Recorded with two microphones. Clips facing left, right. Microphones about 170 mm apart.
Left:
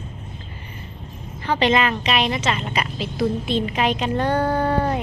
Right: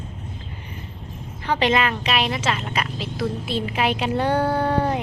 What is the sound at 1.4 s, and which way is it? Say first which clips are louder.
A woman's voice: left 1 dB; 10° right (ahead or behind).